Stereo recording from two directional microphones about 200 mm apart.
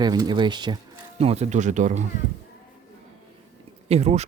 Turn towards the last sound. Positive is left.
turn(degrees=-35)  # may be behind; listen again after turning